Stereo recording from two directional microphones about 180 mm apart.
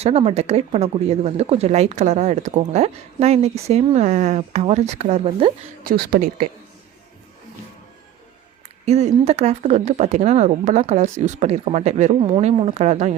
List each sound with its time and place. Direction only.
0.0 s speech: 35° right (ahead or behind)
5.8 s speech: 50° right (ahead or behind)
8.9 s speech: 35° right (ahead or behind)